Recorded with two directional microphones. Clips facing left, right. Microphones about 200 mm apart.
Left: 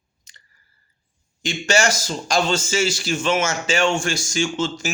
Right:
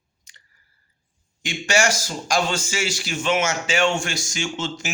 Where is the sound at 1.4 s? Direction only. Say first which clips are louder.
Left 2 dB; 15° right (ahead or behind).